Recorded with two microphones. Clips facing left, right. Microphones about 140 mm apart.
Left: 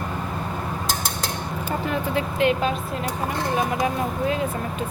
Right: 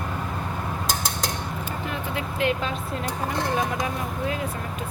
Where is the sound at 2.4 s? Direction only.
20° left (ahead or behind).